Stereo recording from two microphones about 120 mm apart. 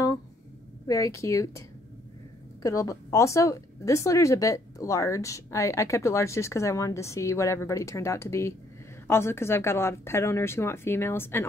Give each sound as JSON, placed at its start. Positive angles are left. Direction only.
{"t": 0.8, "sound": "speech", "side_deg": 30}
{"t": 2.6, "sound": "speech", "side_deg": 25}